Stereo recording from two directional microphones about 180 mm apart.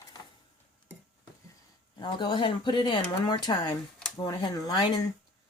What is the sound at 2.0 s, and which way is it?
Speech, 25° left (ahead or behind).